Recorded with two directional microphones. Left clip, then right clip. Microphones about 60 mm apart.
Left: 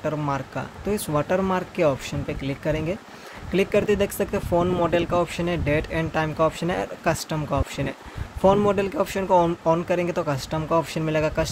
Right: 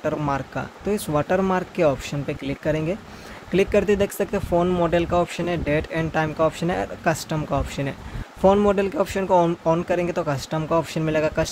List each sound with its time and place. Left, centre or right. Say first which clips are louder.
0.0 s speech: right 2 dB; right
4.5 s speech: right 1 dB; centre